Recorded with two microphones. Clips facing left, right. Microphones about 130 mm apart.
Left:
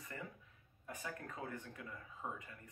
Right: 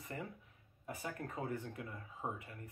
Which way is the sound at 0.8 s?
20° right (ahead or behind).